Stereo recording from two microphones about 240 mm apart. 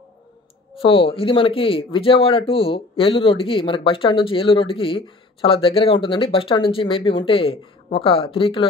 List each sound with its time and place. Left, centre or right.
0.7 s speech: left